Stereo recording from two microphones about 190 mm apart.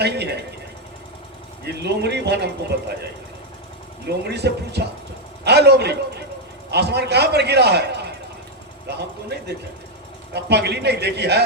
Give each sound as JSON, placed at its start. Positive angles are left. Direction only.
{"t": 0.0, "sound": "a man's voice", "side_deg": -60}
{"t": 1.6, "sound": "a man's voice", "side_deg": -60}
{"t": 4.0, "sound": "a man's voice", "side_deg": -60}
{"t": 10.3, "sound": "a man's voice", "side_deg": -60}